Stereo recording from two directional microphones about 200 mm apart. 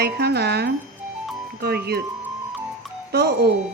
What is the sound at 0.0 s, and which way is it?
Speech, 55° right (ahead or behind).